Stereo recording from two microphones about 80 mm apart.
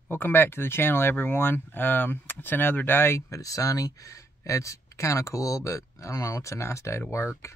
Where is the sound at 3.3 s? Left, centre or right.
Left.